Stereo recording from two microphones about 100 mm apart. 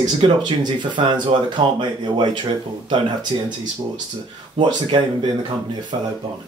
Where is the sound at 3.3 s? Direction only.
50° right (ahead or behind).